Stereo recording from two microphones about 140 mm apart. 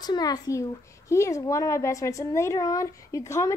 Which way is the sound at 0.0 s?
30° left (ahead or behind).